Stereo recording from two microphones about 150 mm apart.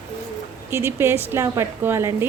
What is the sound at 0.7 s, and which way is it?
A woman's voice, 15° right (ahead or behind).